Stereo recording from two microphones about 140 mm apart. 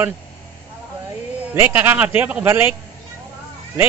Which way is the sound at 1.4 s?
15° right (ahead or behind).